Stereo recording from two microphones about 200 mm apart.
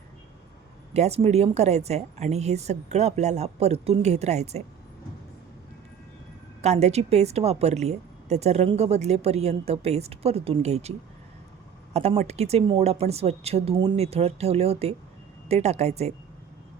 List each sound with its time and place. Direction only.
0.9 s a woman's voice: 30° right (ahead or behind)
6.6 s a woman's voice: 35° right (ahead or behind)
11.9 s a woman's voice: 30° right (ahead or behind)